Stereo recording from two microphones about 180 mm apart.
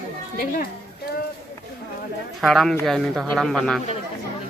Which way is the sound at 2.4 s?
Centre (ahead or behind).